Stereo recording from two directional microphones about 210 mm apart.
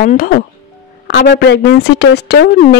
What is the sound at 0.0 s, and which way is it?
Speech, 40° left (ahead or behind).